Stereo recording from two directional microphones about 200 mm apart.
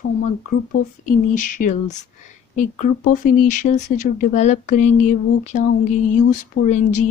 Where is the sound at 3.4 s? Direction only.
40° left (ahead or behind).